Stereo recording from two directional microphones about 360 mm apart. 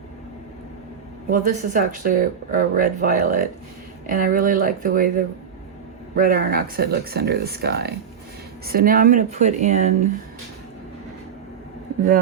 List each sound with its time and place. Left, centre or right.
1.3 s speech: right